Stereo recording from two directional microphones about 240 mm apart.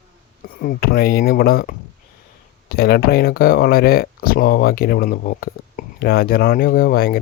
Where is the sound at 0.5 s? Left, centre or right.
Left.